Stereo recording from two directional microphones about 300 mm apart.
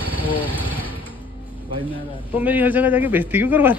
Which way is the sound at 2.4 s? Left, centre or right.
Centre.